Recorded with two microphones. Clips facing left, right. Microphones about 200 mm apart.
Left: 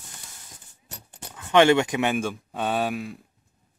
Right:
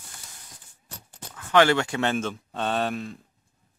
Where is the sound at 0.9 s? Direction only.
20° left (ahead or behind).